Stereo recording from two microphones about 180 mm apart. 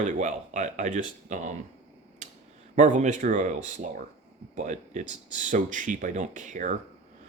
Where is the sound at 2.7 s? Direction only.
40° right (ahead or behind).